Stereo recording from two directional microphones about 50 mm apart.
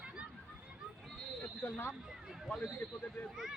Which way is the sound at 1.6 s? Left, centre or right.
Left.